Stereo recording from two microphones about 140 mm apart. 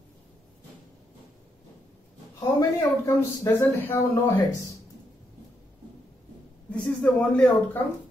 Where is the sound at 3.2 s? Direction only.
15° left (ahead or behind).